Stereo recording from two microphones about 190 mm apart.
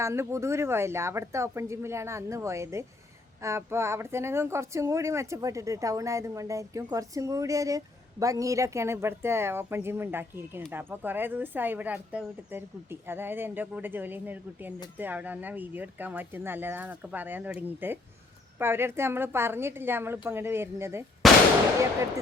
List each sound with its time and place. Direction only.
0.0 s speech: 15° right (ahead or behind)
21.2 s firecracker: centre (ahead or behind)